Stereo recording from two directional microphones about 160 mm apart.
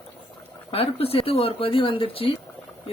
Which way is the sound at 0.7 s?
40° left (ahead or behind).